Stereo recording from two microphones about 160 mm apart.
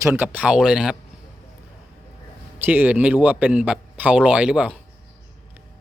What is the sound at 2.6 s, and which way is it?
A man's voice, 10° right (ahead or behind).